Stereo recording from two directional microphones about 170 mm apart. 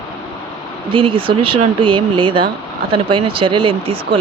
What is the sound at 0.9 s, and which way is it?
Speech, 30° right (ahead or behind).